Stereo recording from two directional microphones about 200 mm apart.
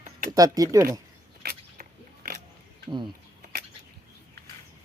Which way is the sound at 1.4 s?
50° right (ahead or behind).